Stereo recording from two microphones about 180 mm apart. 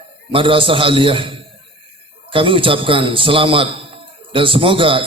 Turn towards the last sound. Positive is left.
turn(degrees=-30)  # may be behind; listen again after turning